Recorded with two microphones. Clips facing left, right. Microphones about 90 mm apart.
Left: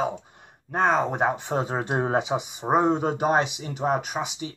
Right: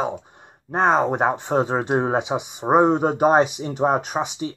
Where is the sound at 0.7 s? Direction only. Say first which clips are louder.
Right 4 dB; 35° right (ahead or behind).